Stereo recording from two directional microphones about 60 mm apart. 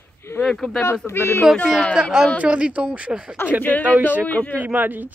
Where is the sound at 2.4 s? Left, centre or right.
Right.